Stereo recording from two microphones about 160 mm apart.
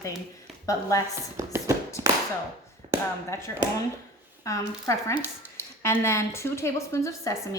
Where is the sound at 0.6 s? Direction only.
20° left (ahead or behind).